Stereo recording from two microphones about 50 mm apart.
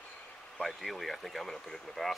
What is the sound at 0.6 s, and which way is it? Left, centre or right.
Speech, centre.